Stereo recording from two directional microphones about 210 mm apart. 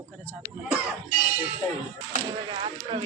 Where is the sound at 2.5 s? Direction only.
25° right (ahead or behind).